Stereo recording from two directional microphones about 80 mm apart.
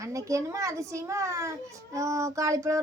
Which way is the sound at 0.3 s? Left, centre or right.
Right.